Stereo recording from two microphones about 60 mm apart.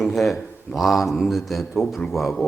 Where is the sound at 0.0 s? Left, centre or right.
Centre.